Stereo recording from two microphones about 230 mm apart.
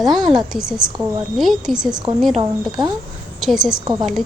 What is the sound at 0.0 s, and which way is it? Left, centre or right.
Speech, centre.